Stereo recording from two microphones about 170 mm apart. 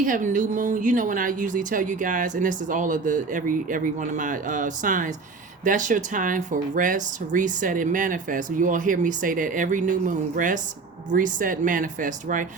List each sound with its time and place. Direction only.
0.0 s a woman's voice: 50° right (ahead or behind)